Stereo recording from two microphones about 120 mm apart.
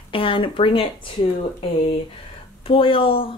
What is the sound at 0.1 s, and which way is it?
Speech, 45° left (ahead or behind).